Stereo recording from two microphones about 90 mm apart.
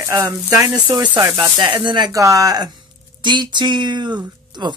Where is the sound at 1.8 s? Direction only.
60° right (ahead or behind).